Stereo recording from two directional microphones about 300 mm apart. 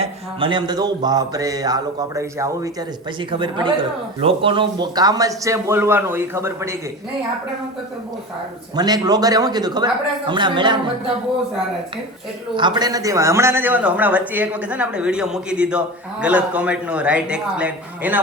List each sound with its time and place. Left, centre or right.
0.0 s mantra: centre
8.7 s mantra: centre
12.5 s a man's voice: centre